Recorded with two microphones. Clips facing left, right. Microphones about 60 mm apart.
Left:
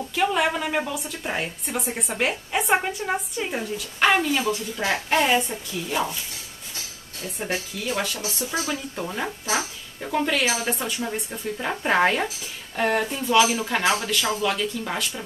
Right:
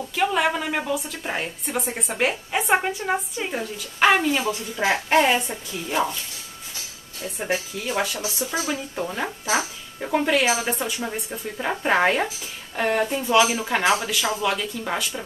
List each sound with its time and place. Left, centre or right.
0.0 s a woman's voice: centre
4.8 s speech: centre
7.3 s speech: centre
10.7 s a woman's voice: centre